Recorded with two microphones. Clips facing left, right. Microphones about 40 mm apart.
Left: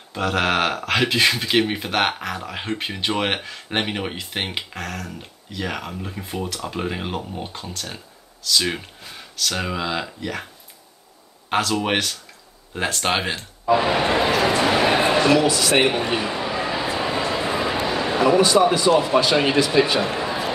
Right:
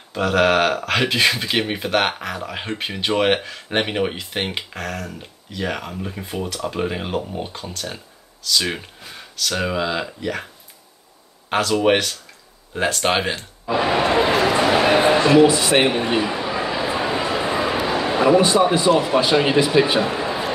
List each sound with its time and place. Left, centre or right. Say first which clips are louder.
0.1 s speech: right 4 dB; centre
11.4 s speech: right 4 dB; centre
15.1 s a man's voice: right 4 dB; right
16.2 s chatter: right 2 dB; centre
17.0 s dog: right 1 dB; centre
17.8 s a sound: right 2 dB; centre
18.2 s a sound: right 1 dB; right
18.6 s a man's voice: right 1 dB; right; by 20.2 s centre